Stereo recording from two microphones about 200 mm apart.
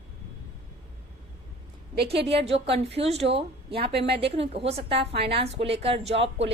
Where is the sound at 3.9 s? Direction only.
55° right (ahead or behind).